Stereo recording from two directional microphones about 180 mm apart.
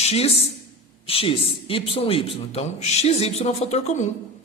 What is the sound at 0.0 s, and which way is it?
Speech, 35° left (ahead or behind).